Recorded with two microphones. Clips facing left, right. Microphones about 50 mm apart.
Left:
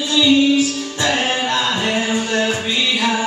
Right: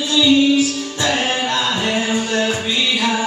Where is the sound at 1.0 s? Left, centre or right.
Left.